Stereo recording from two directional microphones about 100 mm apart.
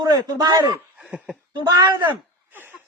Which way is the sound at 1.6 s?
50° right (ahead or behind).